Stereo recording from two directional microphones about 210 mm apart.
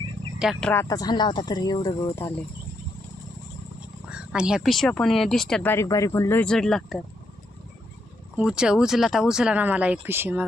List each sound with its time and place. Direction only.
0.3 s speech: 5° right (ahead or behind)
0.7 s speech: 15° left (ahead or behind)
4.1 s speech: 5° right (ahead or behind)
8.4 s speech: 5° right (ahead or behind)